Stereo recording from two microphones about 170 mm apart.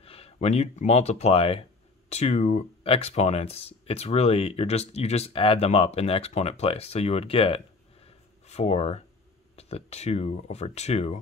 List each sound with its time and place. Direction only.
0.0 s speech: 35° left (ahead or behind)